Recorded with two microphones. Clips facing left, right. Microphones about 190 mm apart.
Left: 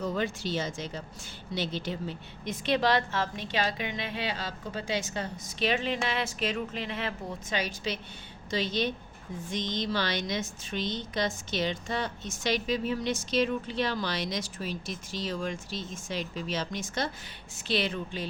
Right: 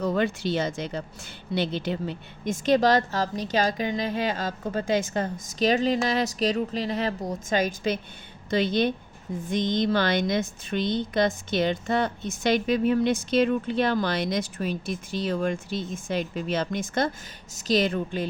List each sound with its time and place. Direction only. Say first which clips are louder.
0.0 s a woman's voice: right 6 dB; 65° right (ahead or behind)
17.5 s a woman's voice: right 7 dB; 40° right (ahead or behind)